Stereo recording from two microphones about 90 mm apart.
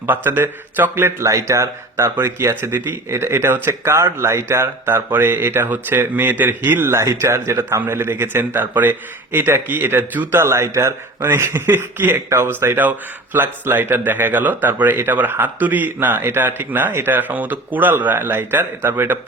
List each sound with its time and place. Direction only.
0.0 s speech: 25° right (ahead or behind)